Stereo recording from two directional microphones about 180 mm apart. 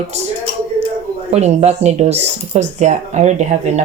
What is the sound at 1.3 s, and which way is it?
Speech, 35° right (ahead or behind).